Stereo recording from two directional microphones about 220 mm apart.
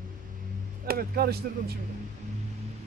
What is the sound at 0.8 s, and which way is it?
Speech, 45° right (ahead or behind).